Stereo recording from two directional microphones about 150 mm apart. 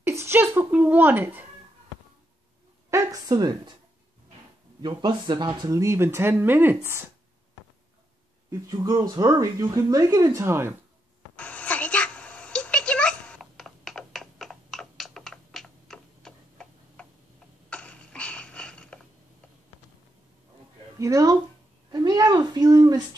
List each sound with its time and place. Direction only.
0.0 s speech: 15° right (ahead or behind)
2.9 s speech: 20° right (ahead or behind)
4.8 s speech: 30° right (ahead or behind)
8.5 s speech: 25° right (ahead or behind)
11.3 s a sound: 10° left (ahead or behind)
21.0 s speech: 25° right (ahead or behind)